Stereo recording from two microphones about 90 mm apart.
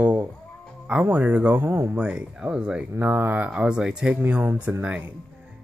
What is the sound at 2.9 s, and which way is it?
Speech, 20° right (ahead or behind).